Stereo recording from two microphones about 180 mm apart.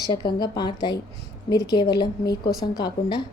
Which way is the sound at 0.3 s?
25° left (ahead or behind).